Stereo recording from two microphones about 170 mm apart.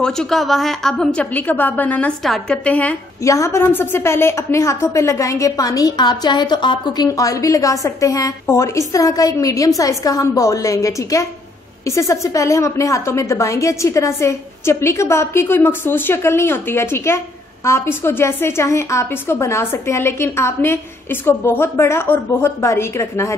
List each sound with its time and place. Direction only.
0.0 s a woman's voice: 5° left (ahead or behind)